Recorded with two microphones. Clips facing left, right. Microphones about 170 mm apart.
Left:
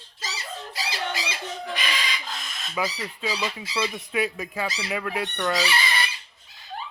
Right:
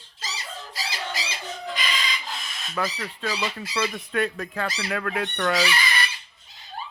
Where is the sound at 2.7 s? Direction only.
10° left (ahead or behind).